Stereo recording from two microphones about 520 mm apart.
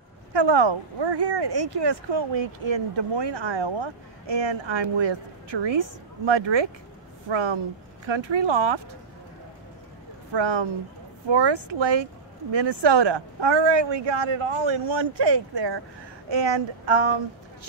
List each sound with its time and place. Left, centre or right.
0.3 s speech: right
10.3 s speech: right